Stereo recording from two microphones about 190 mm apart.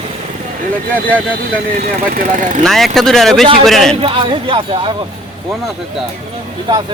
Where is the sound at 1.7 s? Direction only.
45° right (ahead or behind).